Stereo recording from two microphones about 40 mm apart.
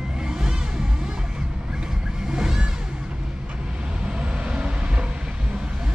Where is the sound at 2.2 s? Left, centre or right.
Centre.